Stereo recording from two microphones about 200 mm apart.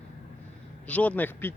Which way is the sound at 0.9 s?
5° left (ahead or behind).